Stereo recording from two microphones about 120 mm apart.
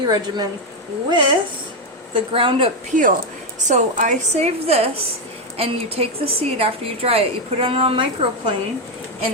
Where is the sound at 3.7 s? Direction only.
85° right; by 8.0 s 50° right (ahead or behind).